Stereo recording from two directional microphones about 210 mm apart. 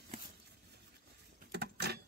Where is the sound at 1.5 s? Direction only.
50° right (ahead or behind).